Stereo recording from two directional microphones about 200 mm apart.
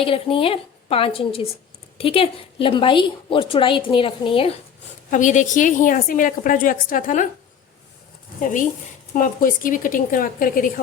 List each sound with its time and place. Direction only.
0.0 s a woman's voice: 25° left (ahead or behind)
5.1 s a woman's voice: 40° left (ahead or behind)
9.1 s a woman's voice: 45° left (ahead or behind)